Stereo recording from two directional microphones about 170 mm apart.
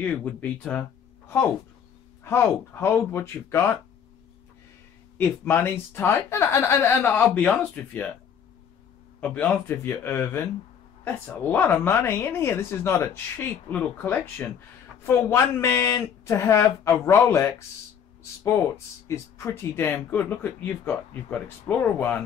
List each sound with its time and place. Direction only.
0.0 s speech: 10° left (ahead or behind)
2.2 s speech: 15° left (ahead or behind)
5.1 s speech: 10° left (ahead or behind)
9.2 s speech: 10° left (ahead or behind)
19.0 s speech: 15° left (ahead or behind)